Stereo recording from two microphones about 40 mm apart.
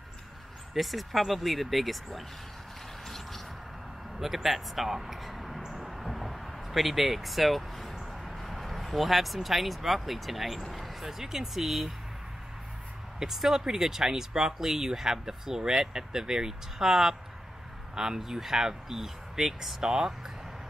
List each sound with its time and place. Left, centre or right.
0.7 s speech: centre
4.2 s speech: centre
5.8 s a sound: centre
8.1 s speech: centre
13.2 s speech: centre